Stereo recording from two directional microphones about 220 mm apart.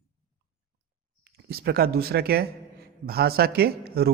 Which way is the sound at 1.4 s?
45° right (ahead or behind).